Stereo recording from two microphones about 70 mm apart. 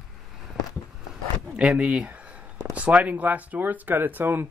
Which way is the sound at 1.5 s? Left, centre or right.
Centre.